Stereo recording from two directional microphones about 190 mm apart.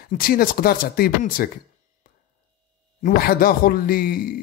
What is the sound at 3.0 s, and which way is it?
Speech, 50° left (ahead or behind).